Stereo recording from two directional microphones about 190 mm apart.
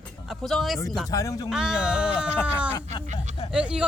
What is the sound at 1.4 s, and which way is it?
Speech, 5° right (ahead or behind).